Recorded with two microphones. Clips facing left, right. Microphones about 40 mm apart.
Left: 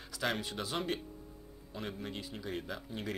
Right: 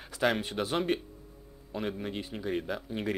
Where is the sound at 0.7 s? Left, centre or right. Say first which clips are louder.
Right 7 dB; centre.